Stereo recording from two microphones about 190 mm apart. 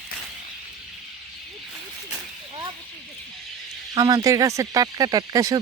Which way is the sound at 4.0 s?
20° right (ahead or behind).